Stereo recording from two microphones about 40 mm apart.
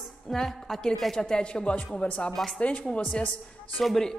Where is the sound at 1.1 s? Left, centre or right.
Left.